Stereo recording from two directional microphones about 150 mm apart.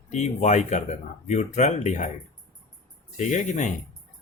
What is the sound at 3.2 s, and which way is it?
Speech, 55° left (ahead or behind).